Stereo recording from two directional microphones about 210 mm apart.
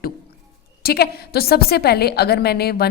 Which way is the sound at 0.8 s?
50° left (ahead or behind).